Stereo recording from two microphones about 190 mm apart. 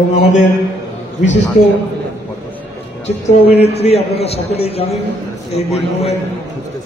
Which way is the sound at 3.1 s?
35° left (ahead or behind).